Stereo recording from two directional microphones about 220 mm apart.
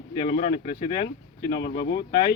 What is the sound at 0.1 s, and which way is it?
Speech, 20° left (ahead or behind).